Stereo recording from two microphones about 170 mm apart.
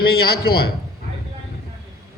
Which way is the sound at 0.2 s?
70° left (ahead or behind).